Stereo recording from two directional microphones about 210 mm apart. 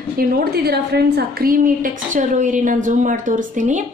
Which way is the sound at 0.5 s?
50° right (ahead or behind).